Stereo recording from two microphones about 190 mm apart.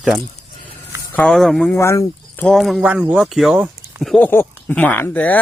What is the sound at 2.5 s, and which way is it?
Speech, centre (ahead or behind).